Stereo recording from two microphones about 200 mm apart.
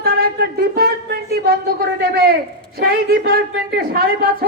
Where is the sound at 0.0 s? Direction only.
50° right (ahead or behind).